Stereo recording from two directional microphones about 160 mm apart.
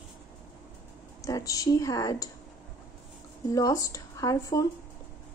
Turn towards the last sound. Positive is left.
turn(degrees=20)  # may be behind; listen again after turning